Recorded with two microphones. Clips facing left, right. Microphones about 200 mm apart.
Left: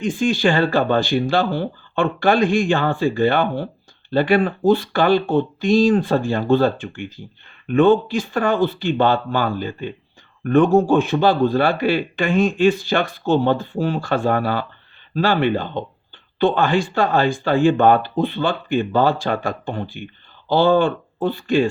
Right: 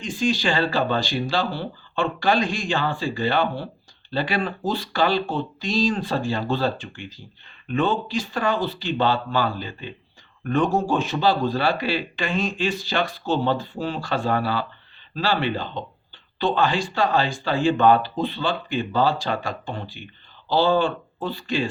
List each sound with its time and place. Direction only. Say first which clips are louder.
0.0 s a man's voice: left 5 dB; 55° left (ahead or behind)